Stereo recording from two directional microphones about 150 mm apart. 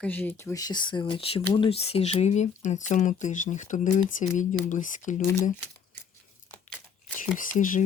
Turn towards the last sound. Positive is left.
turn(degrees=60)  # may be behind; listen again after turning